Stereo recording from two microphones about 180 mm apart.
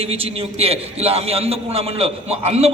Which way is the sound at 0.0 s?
35° right (ahead or behind).